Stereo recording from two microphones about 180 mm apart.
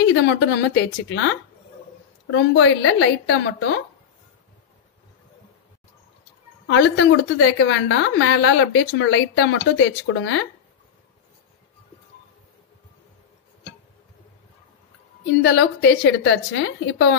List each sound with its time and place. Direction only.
0.1 s a woman's voice: 75° left (ahead or behind)
6.7 s a woman's voice: 90° left
15.4 s a woman's voice: 75° left (ahead or behind)